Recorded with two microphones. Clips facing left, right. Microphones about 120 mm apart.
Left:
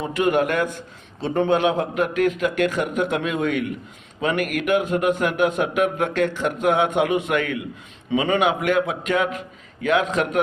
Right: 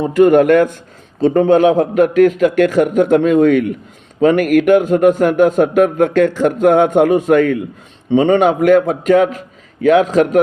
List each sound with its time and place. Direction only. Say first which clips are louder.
0.0 s a man's voice: right 11 dB; 45° right (ahead or behind)